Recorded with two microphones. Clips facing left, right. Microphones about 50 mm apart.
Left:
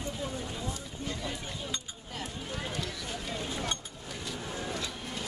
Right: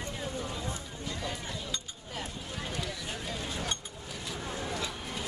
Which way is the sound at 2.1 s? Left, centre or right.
Centre.